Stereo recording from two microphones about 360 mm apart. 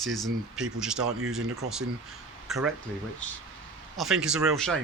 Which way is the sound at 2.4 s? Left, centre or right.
Centre.